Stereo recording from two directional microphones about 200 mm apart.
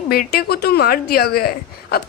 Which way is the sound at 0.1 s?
50° left (ahead or behind).